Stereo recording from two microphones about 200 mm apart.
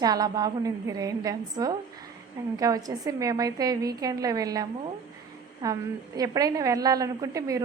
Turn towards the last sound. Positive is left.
turn(degrees=-15)  # may be behind; listen again after turning